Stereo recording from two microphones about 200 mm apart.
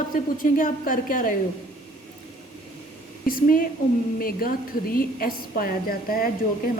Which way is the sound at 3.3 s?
45° left (ahead or behind).